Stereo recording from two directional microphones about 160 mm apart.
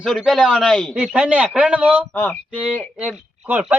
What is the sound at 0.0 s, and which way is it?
Speech, centre (ahead or behind).